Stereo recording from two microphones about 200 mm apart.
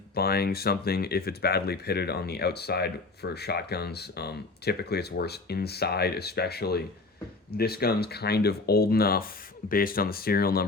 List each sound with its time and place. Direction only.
0.1 s speech: 50° left (ahead or behind)